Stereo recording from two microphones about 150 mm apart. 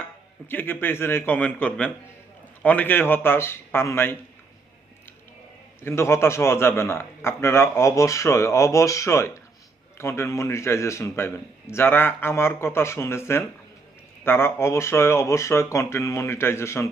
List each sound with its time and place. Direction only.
0.4 s a man's voice: 15° left (ahead or behind)
5.8 s a man's voice: 20° left (ahead or behind)